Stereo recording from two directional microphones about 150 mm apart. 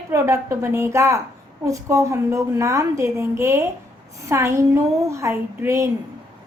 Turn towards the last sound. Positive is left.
turn(degrees=-20)  # may be behind; listen again after turning